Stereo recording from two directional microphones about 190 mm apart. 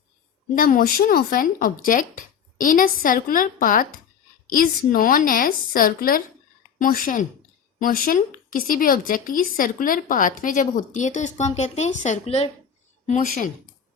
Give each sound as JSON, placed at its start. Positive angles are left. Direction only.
{"t": 0.5, "sound": "speech", "side_deg": 50}
{"t": 13.1, "sound": "speech", "side_deg": 45}